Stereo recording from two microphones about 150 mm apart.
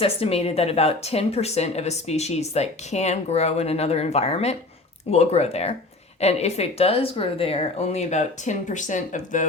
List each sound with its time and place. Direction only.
0.0 s speech: 40° left (ahead or behind)